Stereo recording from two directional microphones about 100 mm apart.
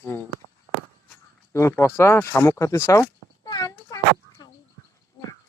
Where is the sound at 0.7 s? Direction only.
35° left (ahead or behind).